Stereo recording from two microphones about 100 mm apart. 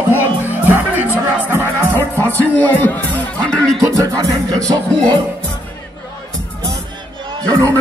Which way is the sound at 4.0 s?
35° right (ahead or behind).